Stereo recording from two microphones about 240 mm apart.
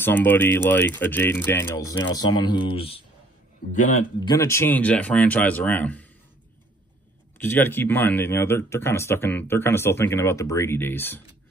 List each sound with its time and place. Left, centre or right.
0.0 s a man's voice: centre; by 4.0 s left
4.2 s a man's voice: centre
7.4 s a man's voice: centre